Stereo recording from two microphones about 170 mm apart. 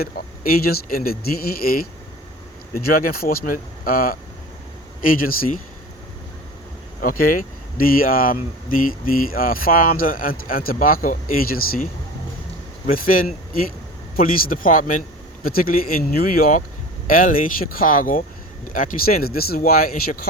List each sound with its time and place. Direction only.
0.0 s speech: 60° left (ahead or behind)
7.0 s speech: 55° left (ahead or behind)
12.9 s speech: 55° left (ahead or behind)